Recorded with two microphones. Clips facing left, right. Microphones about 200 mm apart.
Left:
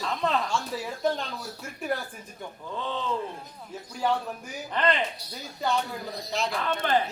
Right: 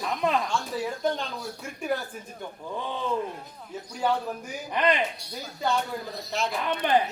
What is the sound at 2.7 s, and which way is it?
Speech, 15° right (ahead or behind).